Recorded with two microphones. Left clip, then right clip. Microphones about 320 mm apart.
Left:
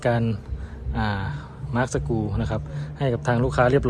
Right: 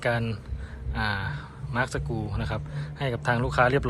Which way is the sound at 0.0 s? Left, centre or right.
Centre.